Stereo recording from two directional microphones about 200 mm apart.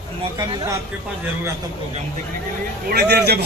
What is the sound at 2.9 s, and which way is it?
Speech, 55° right (ahead or behind).